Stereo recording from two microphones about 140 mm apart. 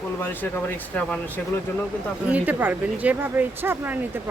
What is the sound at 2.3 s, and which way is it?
Speech, 10° right (ahead or behind).